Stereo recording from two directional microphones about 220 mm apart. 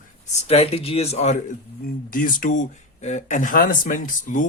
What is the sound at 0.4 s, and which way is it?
Speech, 25° left (ahead or behind).